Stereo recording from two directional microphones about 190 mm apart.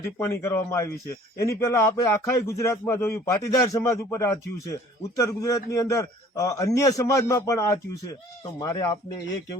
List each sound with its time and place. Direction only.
0.4 s a man's voice: 15° left (ahead or behind)